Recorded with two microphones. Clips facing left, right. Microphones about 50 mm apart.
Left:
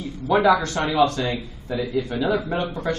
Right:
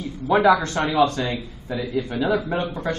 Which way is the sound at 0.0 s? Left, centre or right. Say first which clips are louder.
Right 1 dB; centre.